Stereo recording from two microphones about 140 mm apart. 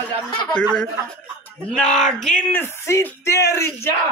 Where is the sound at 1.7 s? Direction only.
5° left (ahead or behind).